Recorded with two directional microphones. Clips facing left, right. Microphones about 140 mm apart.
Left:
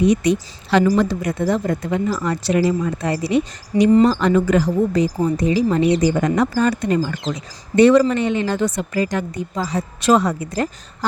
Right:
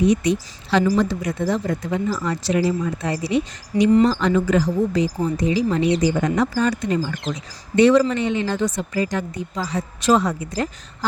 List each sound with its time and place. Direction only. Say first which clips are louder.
0.1 s speech: left 2 dB; 60° left (ahead or behind)
5.5 s a woman's voice: left 2 dB; 45° left (ahead or behind)
6.1 s a woman's voice: left 2 dB; 60° left (ahead or behind)